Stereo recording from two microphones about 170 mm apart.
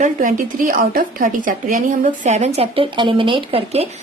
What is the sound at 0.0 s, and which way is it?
Speech, 50° right (ahead or behind).